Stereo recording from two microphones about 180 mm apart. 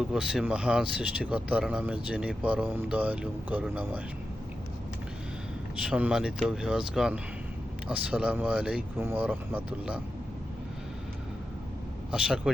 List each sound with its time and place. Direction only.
0.0 s speech: 5° right (ahead or behind)
5.8 s speech: 5° right (ahead or behind)
12.1 s speech: 5° right (ahead or behind)